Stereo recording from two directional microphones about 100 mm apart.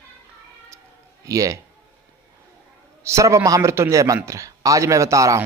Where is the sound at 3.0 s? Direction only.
30° right (ahead or behind).